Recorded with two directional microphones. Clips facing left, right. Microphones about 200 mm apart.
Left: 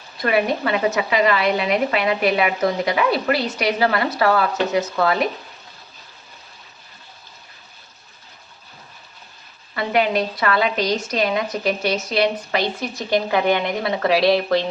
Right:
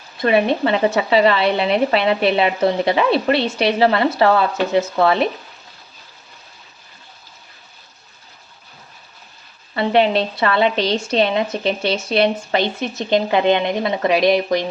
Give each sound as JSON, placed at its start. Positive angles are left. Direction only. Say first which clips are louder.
{"t": 0.2, "sound": "speech", "louder": "right 4 dB", "side_deg": -25}
{"t": 9.7, "sound": "speech", "louder": "right 4 dB", "side_deg": -30}